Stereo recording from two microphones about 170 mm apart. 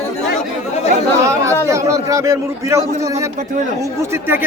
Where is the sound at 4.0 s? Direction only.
15° right (ahead or behind).